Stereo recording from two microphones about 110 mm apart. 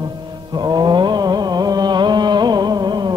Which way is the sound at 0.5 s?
40° right (ahead or behind).